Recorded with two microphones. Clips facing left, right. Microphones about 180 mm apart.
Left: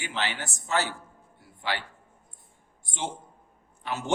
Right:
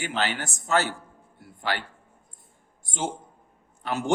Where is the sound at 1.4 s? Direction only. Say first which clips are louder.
Right 2 dB; 50° right (ahead or behind).